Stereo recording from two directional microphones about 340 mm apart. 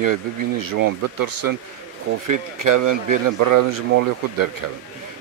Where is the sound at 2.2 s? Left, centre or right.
Right.